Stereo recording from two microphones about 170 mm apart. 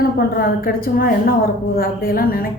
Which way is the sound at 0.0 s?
60° left (ahead or behind).